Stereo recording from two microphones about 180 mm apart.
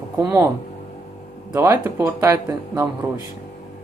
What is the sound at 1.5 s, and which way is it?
Speech, 15° right (ahead or behind).